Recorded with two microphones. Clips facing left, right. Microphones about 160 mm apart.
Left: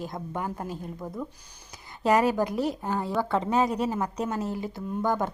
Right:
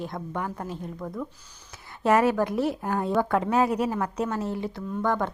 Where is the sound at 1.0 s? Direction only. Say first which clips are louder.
Right 2 dB; 20° left (ahead or behind).